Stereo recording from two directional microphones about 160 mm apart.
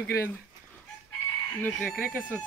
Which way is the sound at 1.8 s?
10° left (ahead or behind).